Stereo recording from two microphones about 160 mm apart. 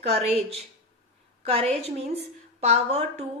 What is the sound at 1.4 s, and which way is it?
A woman's voice, 35° right (ahead or behind).